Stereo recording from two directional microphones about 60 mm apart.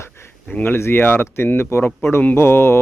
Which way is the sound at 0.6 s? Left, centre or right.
Left.